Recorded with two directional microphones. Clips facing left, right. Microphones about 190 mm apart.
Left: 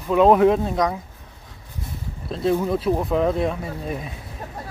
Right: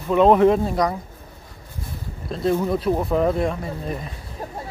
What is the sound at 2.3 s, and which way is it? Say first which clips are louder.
Speech: even; centre (ahead or behind).